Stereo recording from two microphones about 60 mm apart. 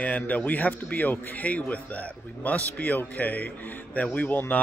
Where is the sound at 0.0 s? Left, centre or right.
Left.